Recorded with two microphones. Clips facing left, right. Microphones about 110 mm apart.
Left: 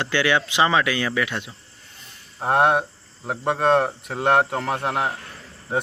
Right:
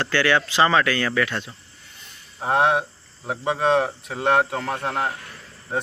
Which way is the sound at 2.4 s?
Centre (ahead or behind).